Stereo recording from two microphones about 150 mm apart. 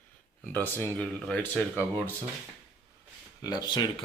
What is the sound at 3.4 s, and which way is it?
Speech, 25° left (ahead or behind).